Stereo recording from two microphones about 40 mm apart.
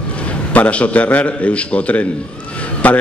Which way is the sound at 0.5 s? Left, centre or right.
Left.